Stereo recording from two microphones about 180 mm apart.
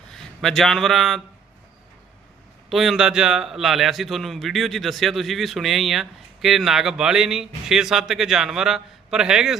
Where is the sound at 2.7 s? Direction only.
Centre (ahead or behind).